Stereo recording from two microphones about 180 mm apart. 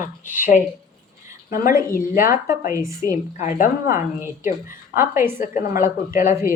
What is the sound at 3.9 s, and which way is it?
Speech, 15° right (ahead or behind).